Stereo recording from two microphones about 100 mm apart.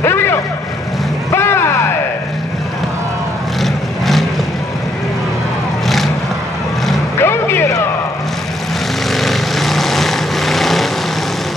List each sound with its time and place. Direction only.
0.0 s vehicle: 25° left (ahead or behind)
1.3 s music: 25° left (ahead or behind)
3.6 s vehicle: centre (ahead or behind)
7.2 s music: 25° left (ahead or behind)
9.1 s vehicle: centre (ahead or behind)